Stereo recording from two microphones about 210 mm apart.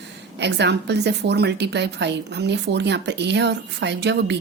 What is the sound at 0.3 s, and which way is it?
A woman's voice, 55° right (ahead or behind).